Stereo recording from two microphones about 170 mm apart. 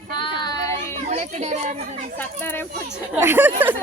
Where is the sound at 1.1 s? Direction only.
40° right (ahead or behind).